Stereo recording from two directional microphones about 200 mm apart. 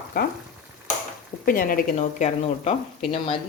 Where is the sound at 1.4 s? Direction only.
45° left (ahead or behind).